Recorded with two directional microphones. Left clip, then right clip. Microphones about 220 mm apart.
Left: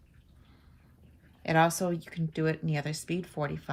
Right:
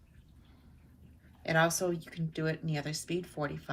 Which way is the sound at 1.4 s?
35° left (ahead or behind).